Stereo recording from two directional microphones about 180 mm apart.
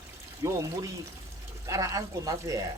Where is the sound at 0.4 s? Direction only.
15° right (ahead or behind).